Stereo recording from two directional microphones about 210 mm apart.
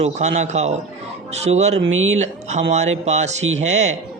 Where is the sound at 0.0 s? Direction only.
35° right (ahead or behind).